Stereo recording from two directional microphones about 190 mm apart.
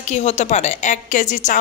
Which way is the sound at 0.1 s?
35° left (ahead or behind).